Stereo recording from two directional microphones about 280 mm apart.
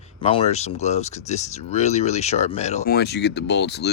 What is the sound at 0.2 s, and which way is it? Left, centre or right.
Speech, left.